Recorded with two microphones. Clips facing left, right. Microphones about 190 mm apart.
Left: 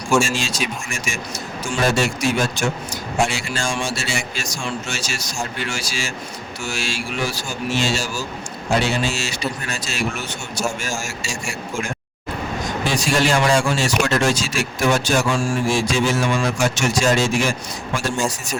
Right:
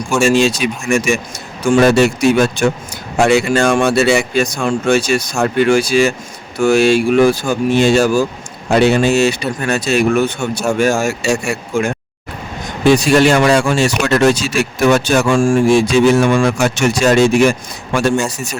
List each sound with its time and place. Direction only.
0.2 s speech: 65° right (ahead or behind)